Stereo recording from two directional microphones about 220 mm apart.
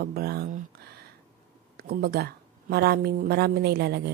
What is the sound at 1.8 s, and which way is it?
Speech, 45° right (ahead or behind).